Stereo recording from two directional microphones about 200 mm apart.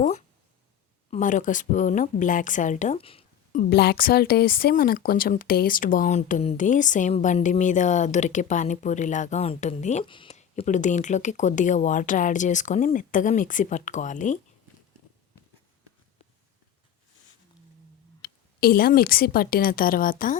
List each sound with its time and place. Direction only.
0.0 s speech: 35° left (ahead or behind)
3.5 s speech: 55° left (ahead or behind)
18.2 s a woman's voice: 50° left (ahead or behind)